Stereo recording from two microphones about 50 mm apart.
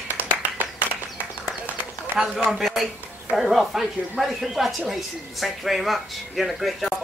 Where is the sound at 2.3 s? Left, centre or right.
Centre.